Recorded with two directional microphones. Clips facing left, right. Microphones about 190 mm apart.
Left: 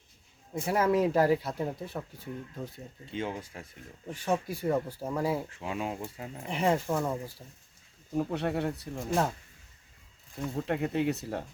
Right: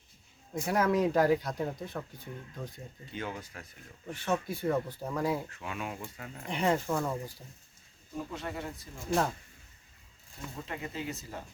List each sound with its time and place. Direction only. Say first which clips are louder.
0.5 s speech: left 2 dB; 5° left (ahead or behind)
3.1 s speech: left 4 dB; 25° left (ahead or behind)
4.1 s speech: left 2 dB; 10° left (ahead or behind)
5.5 s speech: left 4 dB; 25° left (ahead or behind)
6.5 s speech: left 1 dB; 5° left (ahead or behind)
8.1 s speech: left 8 dB; 60° left (ahead or behind)
10.5 s speech: left 10 dB; 60° left (ahead or behind)